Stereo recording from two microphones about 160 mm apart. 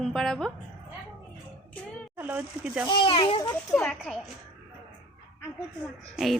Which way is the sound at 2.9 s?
30° left (ahead or behind).